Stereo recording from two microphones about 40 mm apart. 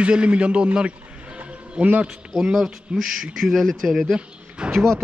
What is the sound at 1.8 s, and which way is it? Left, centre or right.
Speech, right.